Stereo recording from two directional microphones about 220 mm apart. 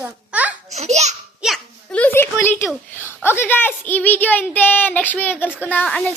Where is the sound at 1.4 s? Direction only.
5° left (ahead or behind).